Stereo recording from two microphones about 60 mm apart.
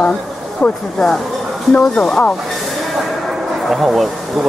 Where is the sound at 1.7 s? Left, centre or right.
Centre.